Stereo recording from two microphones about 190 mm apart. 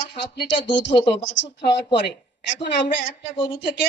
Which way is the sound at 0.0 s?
70° left (ahead or behind).